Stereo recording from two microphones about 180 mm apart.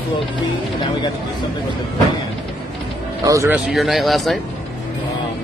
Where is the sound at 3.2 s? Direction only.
15° right (ahead or behind).